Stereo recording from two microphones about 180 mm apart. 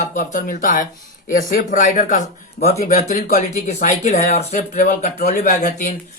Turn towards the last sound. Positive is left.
turn(degrees=50)  # may be behind; listen again after turning